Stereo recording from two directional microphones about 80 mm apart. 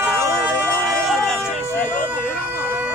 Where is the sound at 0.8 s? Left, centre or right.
Centre.